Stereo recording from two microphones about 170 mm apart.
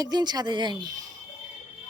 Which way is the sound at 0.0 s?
25° right (ahead or behind).